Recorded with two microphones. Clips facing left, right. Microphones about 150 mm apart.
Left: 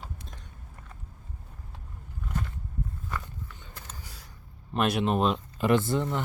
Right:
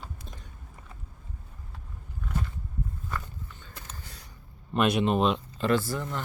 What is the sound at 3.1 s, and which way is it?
Walk, 10° left (ahead or behind).